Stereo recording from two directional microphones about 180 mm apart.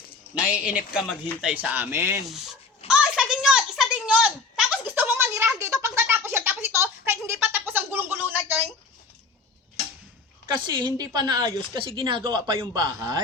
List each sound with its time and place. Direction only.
0.4 s speech: 5° right (ahead or behind)
2.8 s a sound: 5° right (ahead or behind)
10.4 s speech: 25° right (ahead or behind)